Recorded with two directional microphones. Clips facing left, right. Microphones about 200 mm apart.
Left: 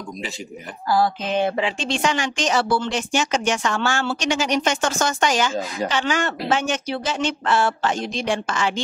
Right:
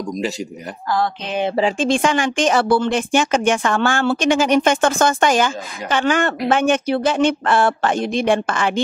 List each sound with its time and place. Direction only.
1.6 s speech: 45° right (ahead or behind)